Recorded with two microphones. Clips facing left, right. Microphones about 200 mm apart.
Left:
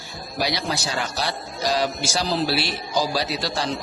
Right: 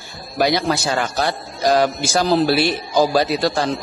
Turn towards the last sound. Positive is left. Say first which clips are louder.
# right 7 dB
turn(degrees=-50)  # may be behind; listen again after turning